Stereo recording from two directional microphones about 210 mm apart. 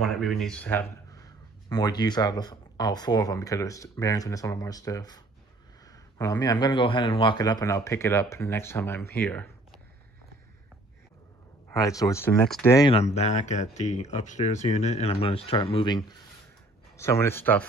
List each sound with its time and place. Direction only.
0.0 s a man's voice: centre (ahead or behind)
11.7 s a man's voice: 15° left (ahead or behind)
12.9 s a man's voice: 30° left (ahead or behind); by 17.6 s 10° left (ahead or behind)